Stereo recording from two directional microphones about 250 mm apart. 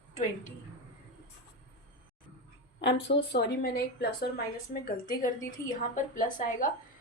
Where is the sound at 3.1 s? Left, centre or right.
Left.